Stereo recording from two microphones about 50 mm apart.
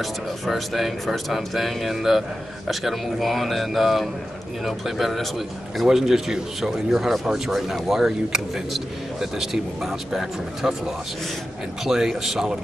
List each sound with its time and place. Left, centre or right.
0.0 s speech: centre
11.8 s speech: centre